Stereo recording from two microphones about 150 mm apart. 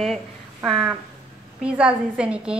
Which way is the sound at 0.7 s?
Centre (ahead or behind).